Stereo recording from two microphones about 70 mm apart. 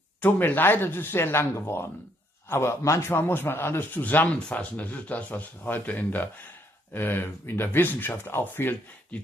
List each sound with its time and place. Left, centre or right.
0.2 s a man's voice: left
4.3 s a man's voice: centre; by 8.7 s left
9.1 s speech: centre